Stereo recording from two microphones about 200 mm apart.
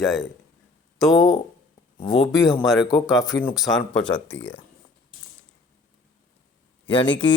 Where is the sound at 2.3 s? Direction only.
Centre (ahead or behind).